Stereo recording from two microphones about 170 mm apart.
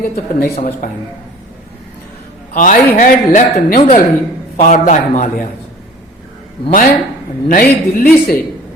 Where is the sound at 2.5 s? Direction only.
45° left (ahead or behind).